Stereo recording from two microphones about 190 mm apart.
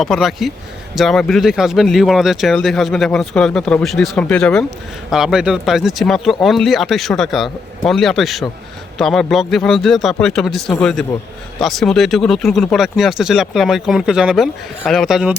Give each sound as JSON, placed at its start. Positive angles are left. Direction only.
{"t": 0.0, "sound": "speech", "side_deg": 0}